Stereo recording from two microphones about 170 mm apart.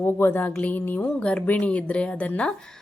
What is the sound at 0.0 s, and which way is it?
A woman's voice, 15° left (ahead or behind).